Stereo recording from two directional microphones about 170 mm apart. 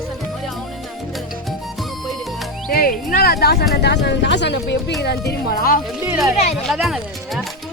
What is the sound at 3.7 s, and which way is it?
Speech, 80° left.